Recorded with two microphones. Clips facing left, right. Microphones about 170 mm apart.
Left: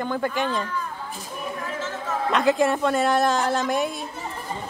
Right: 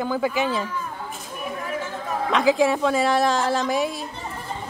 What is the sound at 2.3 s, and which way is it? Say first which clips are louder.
Speech: right 1 dB; centre (ahead or behind).